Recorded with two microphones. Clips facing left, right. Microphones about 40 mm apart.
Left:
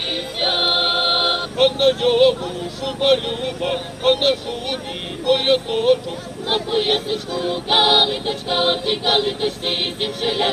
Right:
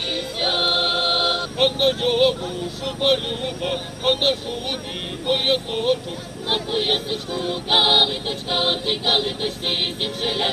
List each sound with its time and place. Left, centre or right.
0.1 s music: centre
1.5 s choir: centre